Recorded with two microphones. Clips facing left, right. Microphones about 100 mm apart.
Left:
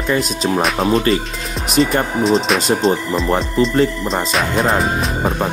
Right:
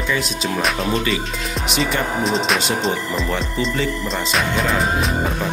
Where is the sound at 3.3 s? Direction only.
35° left (ahead or behind).